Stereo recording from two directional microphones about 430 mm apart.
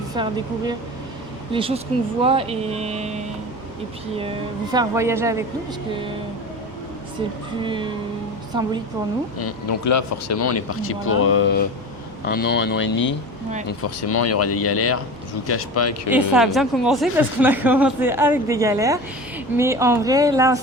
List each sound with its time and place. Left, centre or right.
0.1 s speech: centre
1.5 s speech: centre
4.2 s speech: centre
7.6 s speech: centre
9.4 s speech: left
16.0 s a woman's voice: centre